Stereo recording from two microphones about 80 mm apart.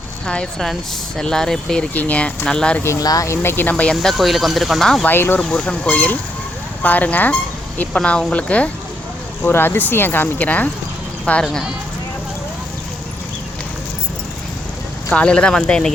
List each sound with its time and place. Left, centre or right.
0.3 s speech: centre
1.9 s speech: centre
3.0 s speech: left
3.2 s speech: left
3.9 s speech: centre
5.0 s speech: left
5.4 s speech: centre
9.4 s speech: left
15.1 s speech: centre